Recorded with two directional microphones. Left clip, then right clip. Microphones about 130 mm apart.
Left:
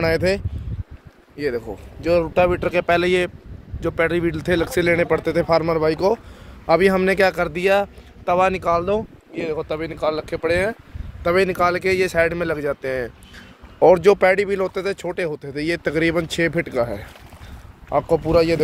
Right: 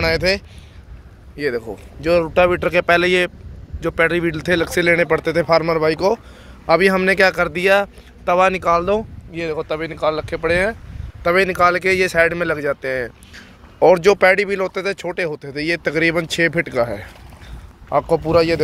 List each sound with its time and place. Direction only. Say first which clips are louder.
0.0 s speech: right 2 dB; 40° left (ahead or behind)
1.3 s a man's voice: right 2 dB; centre (ahead or behind)
13.7 s speech: right 1 dB; 25° left (ahead or behind); by 17.1 s 5° left (ahead or behind)
18.3 s a man's voice: right 2 dB; centre (ahead or behind)